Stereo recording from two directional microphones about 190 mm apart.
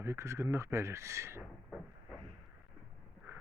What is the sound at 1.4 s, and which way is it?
Vehicle, centre (ahead or behind).